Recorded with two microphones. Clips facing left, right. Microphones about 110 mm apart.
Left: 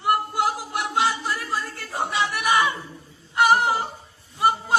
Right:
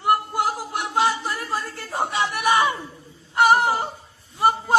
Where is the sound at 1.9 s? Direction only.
45° right (ahead or behind).